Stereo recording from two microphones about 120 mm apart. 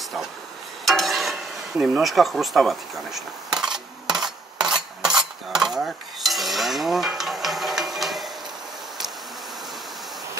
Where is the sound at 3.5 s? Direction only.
5° right (ahead or behind).